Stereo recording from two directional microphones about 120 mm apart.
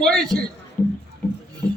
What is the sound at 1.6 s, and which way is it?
Music, 20° left (ahead or behind).